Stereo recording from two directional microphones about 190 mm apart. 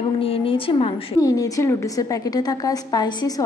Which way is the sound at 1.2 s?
20° left (ahead or behind).